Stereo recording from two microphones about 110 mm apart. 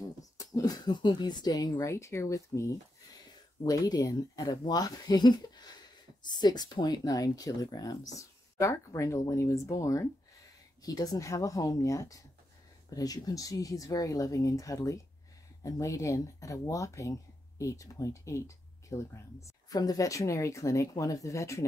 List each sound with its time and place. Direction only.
0.2 s speech: 35° left (ahead or behind)